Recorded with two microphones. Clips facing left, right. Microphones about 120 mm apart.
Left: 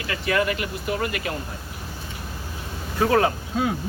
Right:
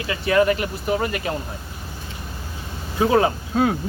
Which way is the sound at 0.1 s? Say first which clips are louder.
Right 5 dB; 30° right (ahead or behind).